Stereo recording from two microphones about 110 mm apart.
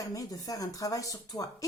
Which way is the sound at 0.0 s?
30° left (ahead or behind).